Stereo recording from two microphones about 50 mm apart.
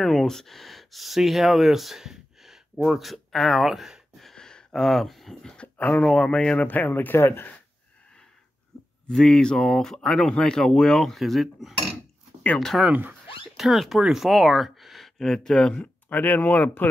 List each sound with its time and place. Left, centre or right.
0.0 s speech: centre
4.4 s a sound: centre
5.4 s speech: centre
5.8 s speech: left
6.0 s speech: centre
6.9 s speech: left
7.2 s speech: left
9.1 s speech: centre
15.6 s speech: left